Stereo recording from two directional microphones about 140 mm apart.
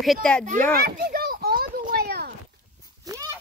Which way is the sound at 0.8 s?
80° right.